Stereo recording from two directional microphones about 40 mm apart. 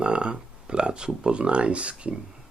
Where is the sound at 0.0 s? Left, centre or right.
Right.